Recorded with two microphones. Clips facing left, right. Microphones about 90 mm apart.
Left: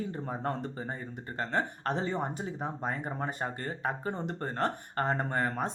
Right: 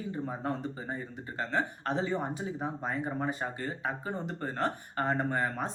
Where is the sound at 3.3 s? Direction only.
45° left (ahead or behind).